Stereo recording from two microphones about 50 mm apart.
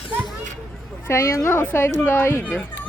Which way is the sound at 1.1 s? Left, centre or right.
Left.